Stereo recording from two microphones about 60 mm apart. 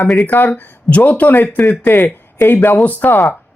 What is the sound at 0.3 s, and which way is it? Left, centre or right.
Speech, left.